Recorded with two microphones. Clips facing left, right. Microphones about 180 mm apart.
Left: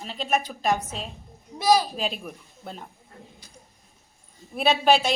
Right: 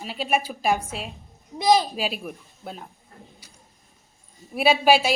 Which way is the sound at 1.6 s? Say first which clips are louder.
Right 1 dB; 20° right (ahead or behind).